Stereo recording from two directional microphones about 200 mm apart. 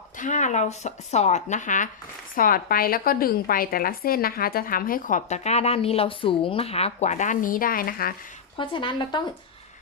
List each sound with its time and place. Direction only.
0.2 s a woman's voice: 40° left (ahead or behind)
8.5 s a woman's voice: 25° left (ahead or behind)